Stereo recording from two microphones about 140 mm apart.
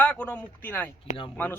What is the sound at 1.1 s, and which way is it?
Speech, 60° left (ahead or behind).